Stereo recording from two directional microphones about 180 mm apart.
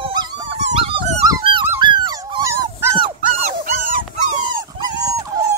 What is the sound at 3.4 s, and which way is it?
Dog, 45° right (ahead or behind).